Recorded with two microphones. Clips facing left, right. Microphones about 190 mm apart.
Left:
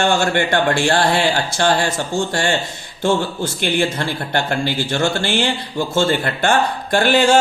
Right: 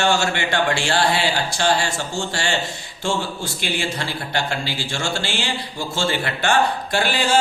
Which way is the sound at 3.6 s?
55° left (ahead or behind).